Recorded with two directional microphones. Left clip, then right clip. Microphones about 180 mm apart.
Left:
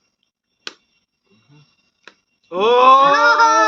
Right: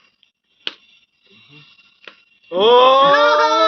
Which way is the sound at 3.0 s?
5° left (ahead or behind).